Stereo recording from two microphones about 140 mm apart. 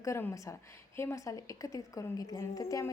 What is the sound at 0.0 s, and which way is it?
A woman's voice, 20° left (ahead or behind).